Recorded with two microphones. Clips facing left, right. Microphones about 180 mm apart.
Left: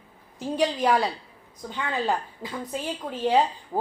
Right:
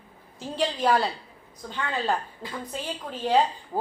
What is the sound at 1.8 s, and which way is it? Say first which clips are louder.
Speech: left 1 dB; 15° left (ahead or behind).